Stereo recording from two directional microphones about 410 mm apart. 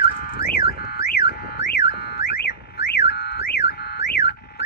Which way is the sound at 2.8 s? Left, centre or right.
Left.